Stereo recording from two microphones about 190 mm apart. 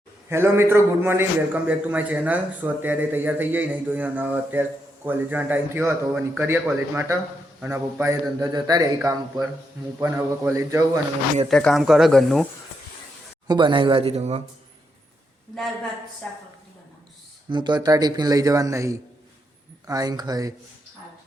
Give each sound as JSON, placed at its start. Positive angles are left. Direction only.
{"t": 0.3, "sound": "a man's voice", "side_deg": -10}
{"t": 10.0, "sound": "a man's voice", "side_deg": -10}
{"t": 11.4, "sound": "speech", "side_deg": 0}
{"t": 13.5, "sound": "speech", "side_deg": -25}
{"t": 17.5, "sound": "speech", "side_deg": -25}